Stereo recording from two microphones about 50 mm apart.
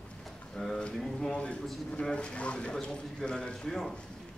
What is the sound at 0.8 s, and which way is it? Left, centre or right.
A man's voice, centre.